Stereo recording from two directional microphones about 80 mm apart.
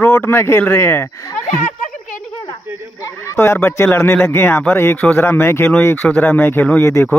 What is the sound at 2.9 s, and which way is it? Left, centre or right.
Speech, left.